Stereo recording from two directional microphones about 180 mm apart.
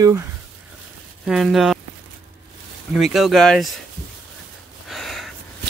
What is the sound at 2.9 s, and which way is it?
Speech, centre (ahead or behind).